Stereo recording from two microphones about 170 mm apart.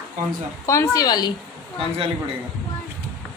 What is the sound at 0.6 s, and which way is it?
Speech, 15° left (ahead or behind).